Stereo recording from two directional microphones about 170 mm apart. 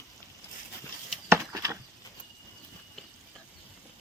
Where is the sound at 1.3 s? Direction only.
20° right (ahead or behind).